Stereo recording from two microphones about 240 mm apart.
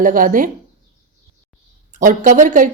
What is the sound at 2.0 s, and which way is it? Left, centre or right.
Speech, right.